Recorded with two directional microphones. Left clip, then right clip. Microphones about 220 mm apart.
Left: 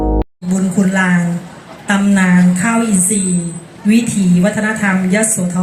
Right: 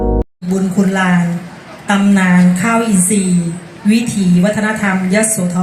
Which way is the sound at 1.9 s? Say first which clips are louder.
Right 1 dB; 30° right (ahead or behind).